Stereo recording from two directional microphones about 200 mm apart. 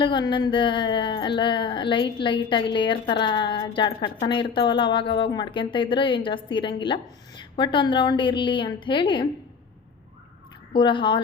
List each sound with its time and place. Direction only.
0.0 s speech: 25° left (ahead or behind)
10.7 s speech: 25° left (ahead or behind)